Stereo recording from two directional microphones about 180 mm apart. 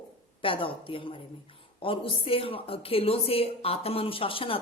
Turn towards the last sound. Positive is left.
turn(degrees=30)  # may be behind; listen again after turning